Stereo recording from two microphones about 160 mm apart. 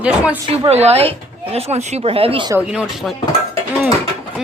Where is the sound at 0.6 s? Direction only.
40° right (ahead or behind).